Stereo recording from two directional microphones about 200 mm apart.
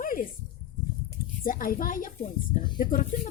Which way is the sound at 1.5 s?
45° left (ahead or behind).